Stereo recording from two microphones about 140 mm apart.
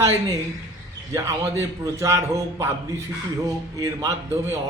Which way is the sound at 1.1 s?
20° right (ahead or behind).